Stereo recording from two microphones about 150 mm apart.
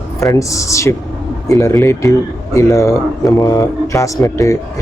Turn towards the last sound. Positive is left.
turn(degrees=20)  # may be behind; listen again after turning